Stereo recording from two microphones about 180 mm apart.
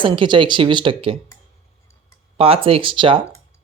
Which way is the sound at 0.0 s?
25° right (ahead or behind).